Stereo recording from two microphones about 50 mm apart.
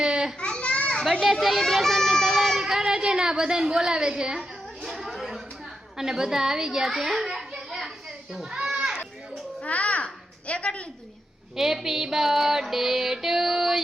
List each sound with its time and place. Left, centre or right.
0.0 s a sound: centre
0.3 s a sound: centre
1.2 s a child's voice: centre
2.6 s music: centre
4.9 s a sound: centre
6.0 s music: centre
6.8 s children playing: centre
8.4 s children playing: centre
9.6 s babbling: left
11.5 s music: centre